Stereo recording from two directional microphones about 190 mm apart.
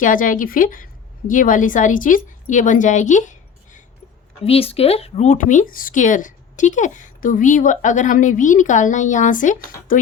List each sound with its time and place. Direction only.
0.0 s a woman's voice: 45° left (ahead or behind)
4.4 s speech: 30° left (ahead or behind)